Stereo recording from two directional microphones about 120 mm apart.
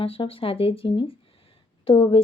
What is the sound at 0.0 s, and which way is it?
Speech, 50° left (ahead or behind).